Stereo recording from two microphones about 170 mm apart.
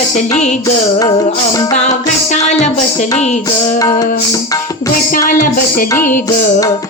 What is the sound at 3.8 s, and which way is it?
Music, 20° left (ahead or behind).